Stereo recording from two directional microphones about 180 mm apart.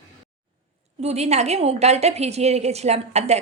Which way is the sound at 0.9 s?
35° right (ahead or behind).